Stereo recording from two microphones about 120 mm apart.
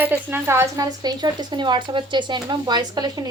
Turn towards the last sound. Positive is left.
turn(degrees=-35)  # may be behind; listen again after turning